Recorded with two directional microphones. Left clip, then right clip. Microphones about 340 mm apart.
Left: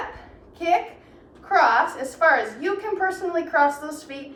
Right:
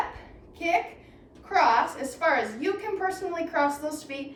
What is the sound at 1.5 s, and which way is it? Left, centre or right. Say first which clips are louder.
A woman's voice: left 4 dB; centre.